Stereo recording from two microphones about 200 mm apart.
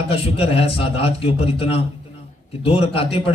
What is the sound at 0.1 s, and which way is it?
A man's voice, 30° left (ahead or behind).